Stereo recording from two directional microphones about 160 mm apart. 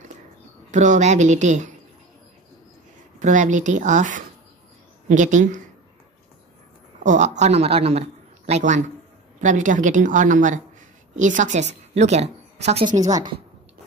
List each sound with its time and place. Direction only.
0.7 s a woman's voice: 50° right (ahead or behind)
3.2 s a woman's voice: 50° right (ahead or behind)
7.0 s a woman's voice: 50° right (ahead or behind)
13.0 s a woman's voice: 25° right (ahead or behind)